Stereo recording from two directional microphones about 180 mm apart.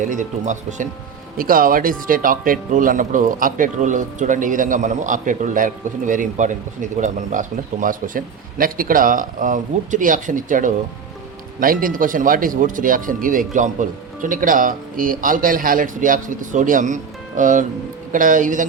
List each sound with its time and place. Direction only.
0.1 s speech: 45° right (ahead or behind)